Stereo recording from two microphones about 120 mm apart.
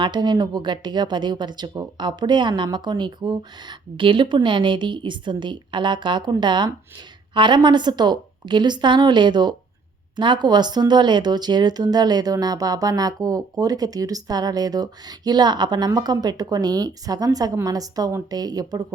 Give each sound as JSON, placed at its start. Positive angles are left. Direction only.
{"t": 0.0, "sound": "speech", "side_deg": -40}